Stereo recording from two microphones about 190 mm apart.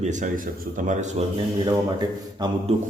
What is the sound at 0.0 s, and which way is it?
Speech, 40° right (ahead or behind).